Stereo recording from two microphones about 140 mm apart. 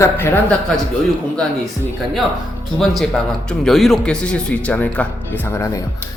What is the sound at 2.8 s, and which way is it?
Speech, centre (ahead or behind).